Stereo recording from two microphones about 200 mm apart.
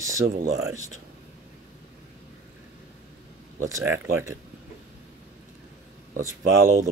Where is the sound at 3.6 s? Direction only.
15° right (ahead or behind).